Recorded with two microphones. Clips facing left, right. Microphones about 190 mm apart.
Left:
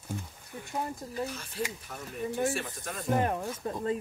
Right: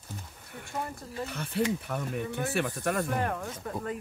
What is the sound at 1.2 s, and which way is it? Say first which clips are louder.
Speech: right 6 dB; 60° right (ahead or behind).